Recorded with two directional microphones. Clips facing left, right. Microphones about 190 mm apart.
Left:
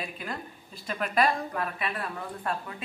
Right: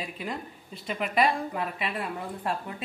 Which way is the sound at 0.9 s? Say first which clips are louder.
Right 1 dB; 15° right (ahead or behind).